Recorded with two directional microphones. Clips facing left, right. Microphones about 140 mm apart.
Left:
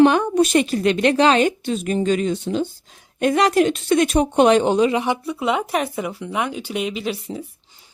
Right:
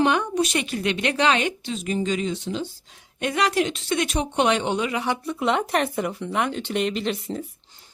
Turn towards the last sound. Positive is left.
turn(degrees=5)  # may be behind; listen again after turning